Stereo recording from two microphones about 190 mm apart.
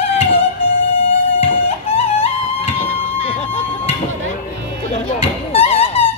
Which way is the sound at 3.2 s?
35° left (ahead or behind).